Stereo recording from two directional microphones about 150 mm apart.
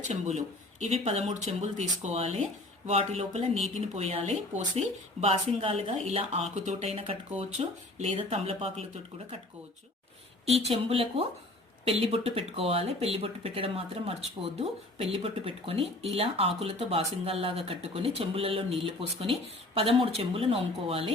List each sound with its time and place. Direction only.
0.0 s speech: 50° right (ahead or behind)
10.6 s speech: 40° right (ahead or behind)